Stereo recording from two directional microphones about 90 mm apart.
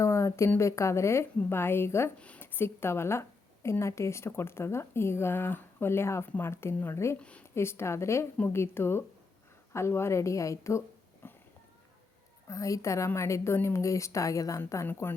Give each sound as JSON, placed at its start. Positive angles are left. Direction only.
{"t": 0.0, "sound": "a woman's voice", "side_deg": 30}
{"t": 7.2, "sound": "speech", "side_deg": 15}
{"t": 7.4, "sound": "a woman's voice", "side_deg": 30}
{"t": 12.5, "sound": "a woman's voice", "side_deg": 35}
{"t": 15.0, "sound": "a woman's voice", "side_deg": 25}